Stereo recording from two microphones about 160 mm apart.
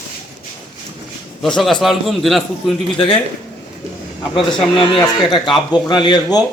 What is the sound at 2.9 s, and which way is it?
Speech, 35° left (ahead or behind).